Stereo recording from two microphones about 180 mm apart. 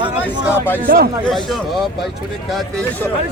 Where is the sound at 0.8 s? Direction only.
60° right (ahead or behind).